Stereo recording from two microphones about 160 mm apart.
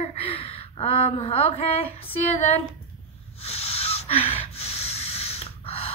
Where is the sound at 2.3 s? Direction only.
45° left (ahead or behind).